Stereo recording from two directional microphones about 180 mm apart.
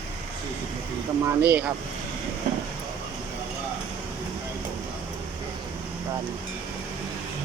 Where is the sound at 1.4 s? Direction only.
10° right (ahead or behind).